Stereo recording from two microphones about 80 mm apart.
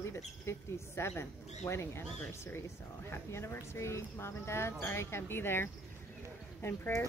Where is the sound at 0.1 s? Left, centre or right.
Left.